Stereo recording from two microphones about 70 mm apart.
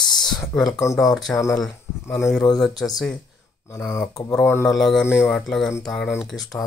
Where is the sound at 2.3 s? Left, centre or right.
Centre.